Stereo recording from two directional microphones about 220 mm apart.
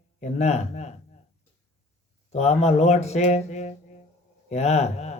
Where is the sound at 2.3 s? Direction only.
30° left (ahead or behind).